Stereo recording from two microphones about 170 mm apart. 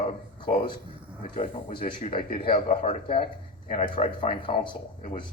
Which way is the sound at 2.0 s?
30° left (ahead or behind).